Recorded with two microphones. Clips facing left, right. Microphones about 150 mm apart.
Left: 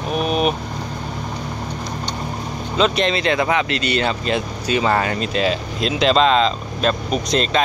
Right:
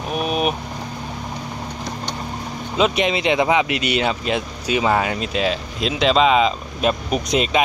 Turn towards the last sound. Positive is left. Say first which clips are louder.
# even
turn(degrees=-10)  # may be behind; listen again after turning